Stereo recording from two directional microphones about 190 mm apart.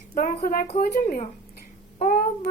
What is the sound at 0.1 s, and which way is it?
A woman's voice, 45° left (ahead or behind).